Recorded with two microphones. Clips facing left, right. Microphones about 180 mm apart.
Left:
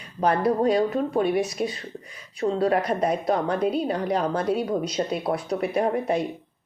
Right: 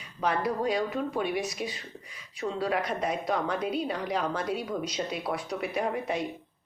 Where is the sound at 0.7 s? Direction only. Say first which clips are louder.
Left 7 dB; 35° left (ahead or behind).